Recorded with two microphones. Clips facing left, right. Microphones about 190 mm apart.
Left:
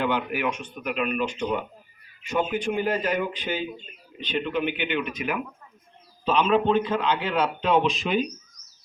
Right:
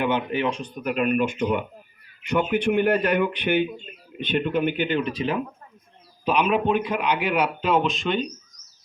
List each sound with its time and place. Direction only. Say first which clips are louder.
0.0 s speech: right 2 dB; 20° right (ahead or behind); by 1.6 s 55° right (ahead or behind)
2.2 s speech: right 4 dB; 65° right (ahead or behind)
4.2 s speech: right 4 dB; 50° right (ahead or behind); by 5.4 s 30° right (ahead or behind)
6.2 s a man's voice: even; 10° right (ahead or behind); by 8.3 s 5° left (ahead or behind)